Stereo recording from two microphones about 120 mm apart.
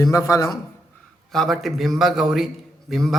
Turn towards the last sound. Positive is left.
turn(degrees=0)  # may be behind; listen again after turning